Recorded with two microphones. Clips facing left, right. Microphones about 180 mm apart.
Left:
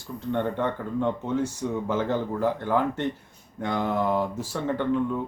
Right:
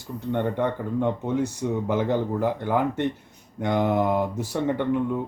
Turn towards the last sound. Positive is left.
turn(degrees=-15)  # may be behind; listen again after turning